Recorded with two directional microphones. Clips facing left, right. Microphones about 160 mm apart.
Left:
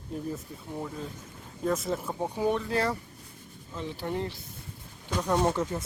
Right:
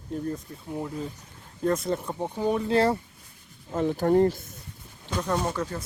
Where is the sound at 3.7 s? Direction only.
50° right (ahead or behind).